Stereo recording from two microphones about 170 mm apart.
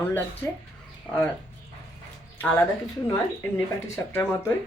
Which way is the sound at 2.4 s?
10° left (ahead or behind).